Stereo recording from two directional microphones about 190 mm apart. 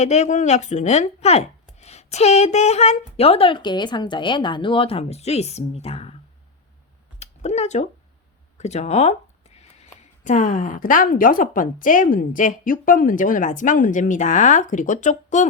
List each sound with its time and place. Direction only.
0.0 s speech: 35° left (ahead or behind)
7.2 s a sound: 35° left (ahead or behind)
8.5 s a woman's voice: 35° left (ahead or behind)